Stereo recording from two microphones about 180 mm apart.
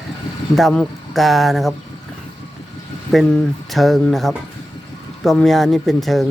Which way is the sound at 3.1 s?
Centre (ahead or behind).